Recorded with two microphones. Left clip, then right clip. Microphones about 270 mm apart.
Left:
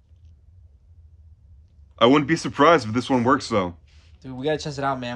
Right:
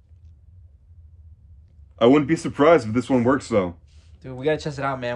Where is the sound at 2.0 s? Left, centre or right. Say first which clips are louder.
Even; centre.